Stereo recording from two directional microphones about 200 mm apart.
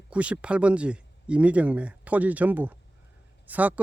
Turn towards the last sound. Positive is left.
turn(degrees=-10)  # may be behind; listen again after turning